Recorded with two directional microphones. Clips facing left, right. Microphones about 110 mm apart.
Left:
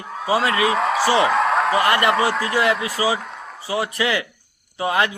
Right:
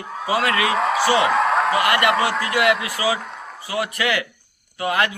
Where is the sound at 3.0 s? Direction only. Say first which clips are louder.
Right 1 dB; centre (ahead or behind).